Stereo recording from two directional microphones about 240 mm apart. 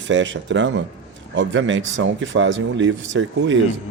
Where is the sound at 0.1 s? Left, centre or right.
Right.